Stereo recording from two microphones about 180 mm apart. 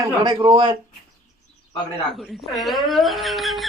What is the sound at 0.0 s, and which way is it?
Speech, 25° right (ahead or behind).